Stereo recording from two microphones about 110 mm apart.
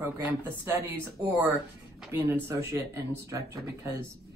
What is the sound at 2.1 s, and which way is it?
Speech, 25° right (ahead or behind).